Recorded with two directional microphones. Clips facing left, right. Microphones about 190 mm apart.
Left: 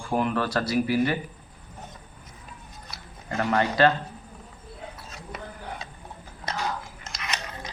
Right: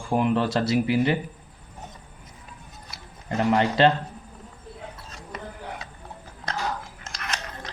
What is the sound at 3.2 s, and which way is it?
Speech, 20° right (ahead or behind).